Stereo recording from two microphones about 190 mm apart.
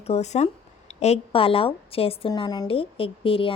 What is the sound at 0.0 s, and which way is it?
Speech, 35° left (ahead or behind).